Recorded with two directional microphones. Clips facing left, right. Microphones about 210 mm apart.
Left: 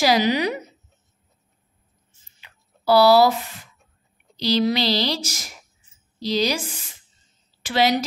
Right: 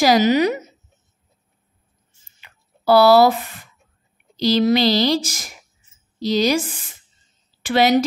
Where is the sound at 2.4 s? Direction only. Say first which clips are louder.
Right 1 dB; 50° right (ahead or behind).